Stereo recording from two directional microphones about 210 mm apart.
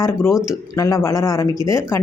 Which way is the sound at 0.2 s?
Centre (ahead or behind).